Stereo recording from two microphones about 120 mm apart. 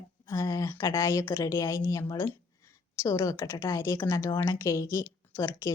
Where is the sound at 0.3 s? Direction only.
25° left (ahead or behind).